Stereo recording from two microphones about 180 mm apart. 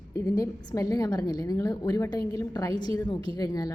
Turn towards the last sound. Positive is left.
turn(degrees=20)  # may be behind; listen again after turning